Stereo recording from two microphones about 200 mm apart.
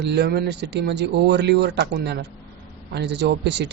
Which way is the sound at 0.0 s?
55° right (ahead or behind).